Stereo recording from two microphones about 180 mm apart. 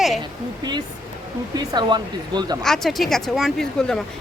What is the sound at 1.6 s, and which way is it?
Speech, 25° right (ahead or behind).